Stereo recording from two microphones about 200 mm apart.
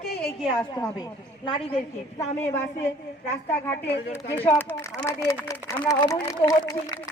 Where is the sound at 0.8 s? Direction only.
20° left (ahead or behind).